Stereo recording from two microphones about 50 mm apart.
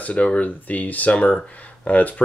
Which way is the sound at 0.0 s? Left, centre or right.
Left.